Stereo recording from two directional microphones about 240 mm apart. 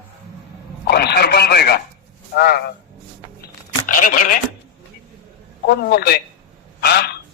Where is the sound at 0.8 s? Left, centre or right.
Left.